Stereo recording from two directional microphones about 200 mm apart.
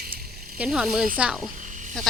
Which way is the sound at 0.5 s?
5° right (ahead or behind).